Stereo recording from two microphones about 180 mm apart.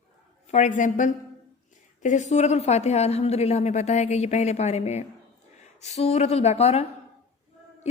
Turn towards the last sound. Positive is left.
turn(degrees=35)  # may be behind; listen again after turning